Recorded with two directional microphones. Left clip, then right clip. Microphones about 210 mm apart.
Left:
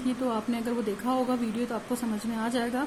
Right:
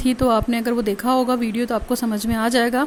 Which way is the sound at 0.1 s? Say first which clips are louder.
Right 12 dB; 45° right (ahead or behind).